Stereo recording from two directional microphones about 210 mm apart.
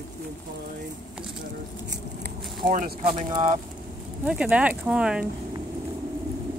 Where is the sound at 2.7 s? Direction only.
40° right (ahead or behind).